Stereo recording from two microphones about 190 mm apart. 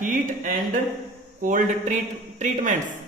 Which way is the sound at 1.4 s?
45° right (ahead or behind).